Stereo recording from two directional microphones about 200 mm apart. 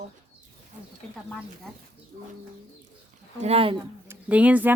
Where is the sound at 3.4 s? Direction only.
30° right (ahead or behind).